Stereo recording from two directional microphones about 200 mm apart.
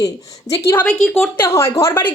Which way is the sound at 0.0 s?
15° left (ahead or behind).